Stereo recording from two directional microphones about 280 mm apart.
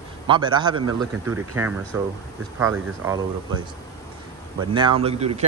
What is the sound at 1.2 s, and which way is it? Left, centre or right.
Speech, right.